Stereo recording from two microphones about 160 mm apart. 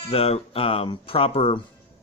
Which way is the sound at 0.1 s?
40° left (ahead or behind).